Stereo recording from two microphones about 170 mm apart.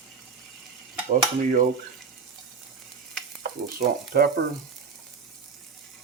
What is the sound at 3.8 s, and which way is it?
Speech, 65° right (ahead or behind).